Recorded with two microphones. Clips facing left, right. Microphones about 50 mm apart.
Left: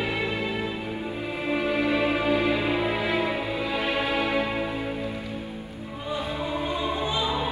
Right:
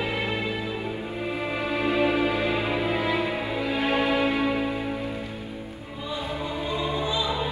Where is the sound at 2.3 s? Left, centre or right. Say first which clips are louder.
Left 2 dB; right.